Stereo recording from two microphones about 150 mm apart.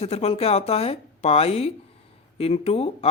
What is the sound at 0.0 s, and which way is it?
Speech, 45° left (ahead or behind).